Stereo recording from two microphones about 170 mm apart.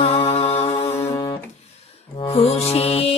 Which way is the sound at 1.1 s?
25° left (ahead or behind).